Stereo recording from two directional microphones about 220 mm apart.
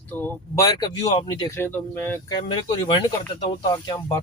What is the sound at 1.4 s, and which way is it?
Speech, 10° left (ahead or behind).